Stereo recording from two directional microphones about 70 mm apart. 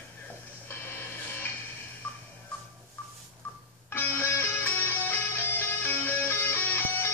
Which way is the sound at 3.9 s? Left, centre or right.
Left.